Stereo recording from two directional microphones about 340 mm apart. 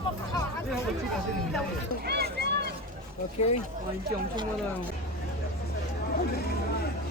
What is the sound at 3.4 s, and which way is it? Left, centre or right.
Speech, centre.